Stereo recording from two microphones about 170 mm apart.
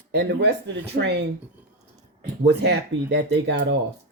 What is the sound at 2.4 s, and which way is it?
Speech, 75° right (ahead or behind).